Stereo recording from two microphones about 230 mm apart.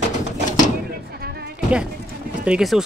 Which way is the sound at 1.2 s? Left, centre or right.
Right.